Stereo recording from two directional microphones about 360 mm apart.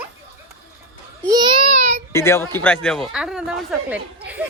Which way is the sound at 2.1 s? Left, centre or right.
Centre.